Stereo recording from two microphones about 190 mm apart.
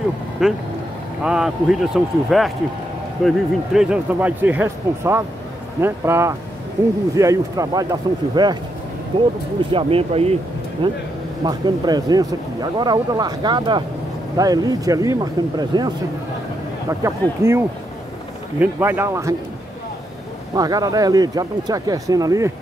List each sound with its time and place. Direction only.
0.4 s speech: centre (ahead or behind); by 15.9 s 25° right (ahead or behind)
17.0 s speech: 15° right (ahead or behind)
20.5 s speech: 20° right (ahead or behind)